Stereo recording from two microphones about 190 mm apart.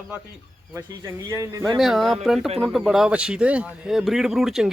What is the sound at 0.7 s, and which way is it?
Speech, 15° right (ahead or behind).